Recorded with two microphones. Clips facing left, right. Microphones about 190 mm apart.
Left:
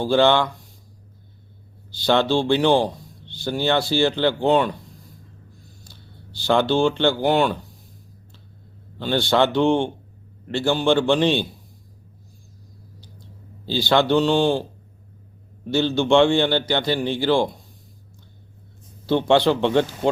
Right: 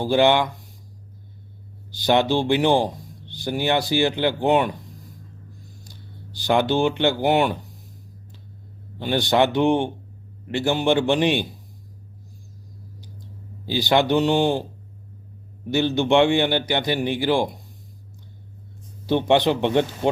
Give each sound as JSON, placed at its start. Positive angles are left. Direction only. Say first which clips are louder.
{"t": 0.0, "sound": "speech", "louder": "even", "side_deg": -15}
{"t": 1.9, "sound": "speech", "louder": "even", "side_deg": -15}
{"t": 5.8, "sound": "speech", "louder": "right 3 dB", "side_deg": -15}
{"t": 9.0, "sound": "speech", "louder": "even", "side_deg": -15}
{"t": 13.7, "sound": "speech", "louder": "left 1 dB", "side_deg": -15}
{"t": 15.7, "sound": "speech", "louder": "left 1 dB", "side_deg": -15}
{"t": 19.0, "sound": "speech", "louder": "left 1 dB", "side_deg": -15}